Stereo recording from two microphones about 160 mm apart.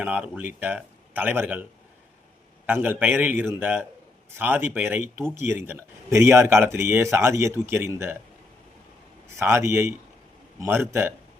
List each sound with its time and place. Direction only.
0.0 s speech: 10° right (ahead or behind)
2.6 s speech: 10° right (ahead or behind)
9.2 s speech: 15° right (ahead or behind)